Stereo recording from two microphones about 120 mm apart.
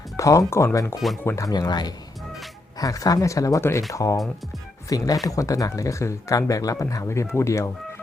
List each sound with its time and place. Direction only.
0.2 s speech: 25° left (ahead or behind)
1.5 s speech: 35° left (ahead or behind)